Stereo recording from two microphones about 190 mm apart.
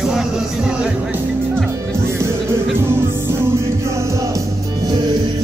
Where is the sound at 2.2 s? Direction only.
15° right (ahead or behind).